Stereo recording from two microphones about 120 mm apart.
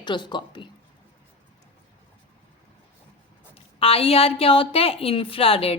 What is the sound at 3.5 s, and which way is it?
A woman's voice, 50° left (ahead or behind).